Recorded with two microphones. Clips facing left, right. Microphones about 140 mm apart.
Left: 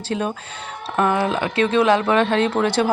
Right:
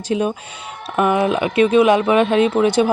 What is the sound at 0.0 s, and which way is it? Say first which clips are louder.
Speech: right 4 dB; 15° right (ahead or behind).